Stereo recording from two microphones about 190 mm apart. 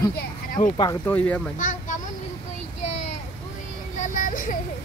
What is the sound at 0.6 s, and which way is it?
Speech, 25° left (ahead or behind).